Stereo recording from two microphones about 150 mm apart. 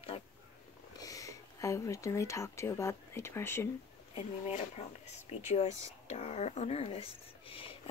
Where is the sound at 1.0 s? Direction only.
20° left (ahead or behind).